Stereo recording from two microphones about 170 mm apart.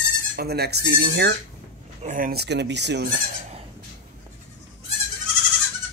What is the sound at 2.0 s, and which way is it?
Speech, 55° right (ahead or behind).